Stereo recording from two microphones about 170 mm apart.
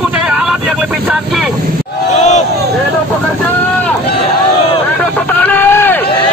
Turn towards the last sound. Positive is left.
turn(degrees=15)  # may be behind; listen again after turning